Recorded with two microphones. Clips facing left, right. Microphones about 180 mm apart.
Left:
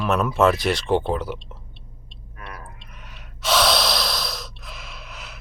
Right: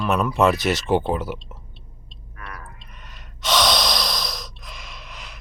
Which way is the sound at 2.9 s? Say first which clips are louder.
Left 1 dB; 5° left (ahead or behind).